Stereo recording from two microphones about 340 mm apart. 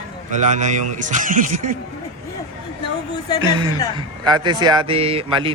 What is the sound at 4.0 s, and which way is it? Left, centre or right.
Speech, centre.